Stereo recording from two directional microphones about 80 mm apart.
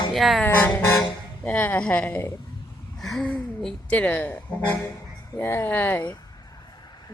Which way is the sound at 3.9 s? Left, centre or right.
Left.